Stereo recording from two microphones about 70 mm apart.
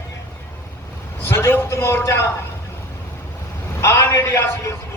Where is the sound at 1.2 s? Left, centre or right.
Left.